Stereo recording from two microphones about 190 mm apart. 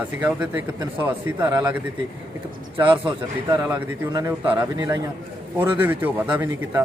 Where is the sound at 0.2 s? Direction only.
10° right (ahead or behind).